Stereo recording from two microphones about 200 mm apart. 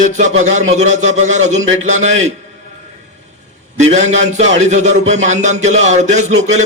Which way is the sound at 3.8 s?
35° right (ahead or behind).